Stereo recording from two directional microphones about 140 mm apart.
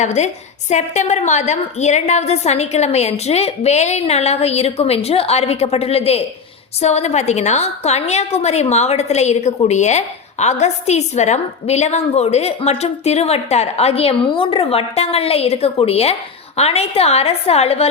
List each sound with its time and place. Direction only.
0.0 s a woman's voice: 60° left (ahead or behind)